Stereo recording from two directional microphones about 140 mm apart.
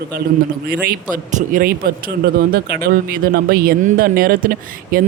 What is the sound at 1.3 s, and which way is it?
Speech, 80° right.